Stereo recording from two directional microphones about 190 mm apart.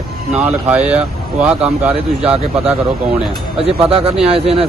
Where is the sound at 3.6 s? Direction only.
30° right (ahead or behind).